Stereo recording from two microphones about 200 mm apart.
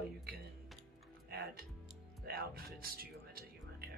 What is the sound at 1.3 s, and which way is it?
Speech, 50° right (ahead or behind).